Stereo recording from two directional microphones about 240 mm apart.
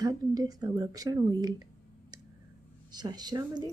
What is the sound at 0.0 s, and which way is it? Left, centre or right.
A woman's voice, centre.